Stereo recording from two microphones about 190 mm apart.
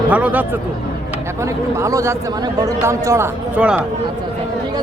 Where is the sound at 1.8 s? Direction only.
15° right (ahead or behind).